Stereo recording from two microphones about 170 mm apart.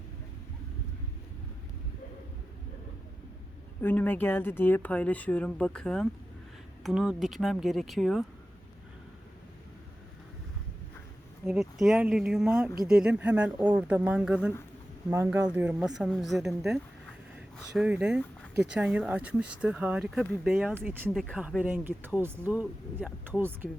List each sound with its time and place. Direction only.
3.8 s speech: 10° left (ahead or behind)
11.4 s speech: 5° right (ahead or behind)
21.1 s speech: centre (ahead or behind)